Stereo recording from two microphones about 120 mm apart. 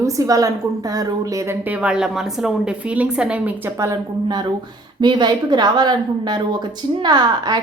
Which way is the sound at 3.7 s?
30° right (ahead or behind).